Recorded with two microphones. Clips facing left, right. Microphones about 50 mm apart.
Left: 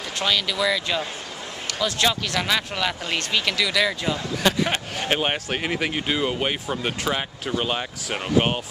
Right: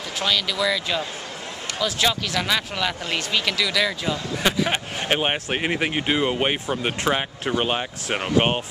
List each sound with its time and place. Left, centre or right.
0.2 s speech: centre
4.6 s speech: centre